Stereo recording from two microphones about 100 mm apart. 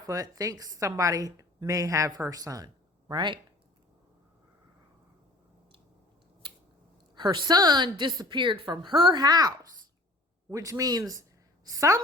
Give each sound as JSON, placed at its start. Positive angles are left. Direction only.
{"t": 0.0, "sound": "a woman's voice", "side_deg": -35}
{"t": 3.1, "sound": "a woman's voice", "side_deg": -50}
{"t": 7.2, "sound": "a woman's voice", "side_deg": -45}